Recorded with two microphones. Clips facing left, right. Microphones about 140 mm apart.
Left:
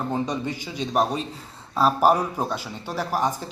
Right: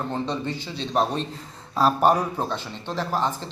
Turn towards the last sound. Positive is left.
turn(degrees=10)  # may be behind; listen again after turning